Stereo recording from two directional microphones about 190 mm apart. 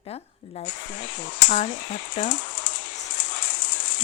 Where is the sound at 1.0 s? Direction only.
70° left (ahead or behind).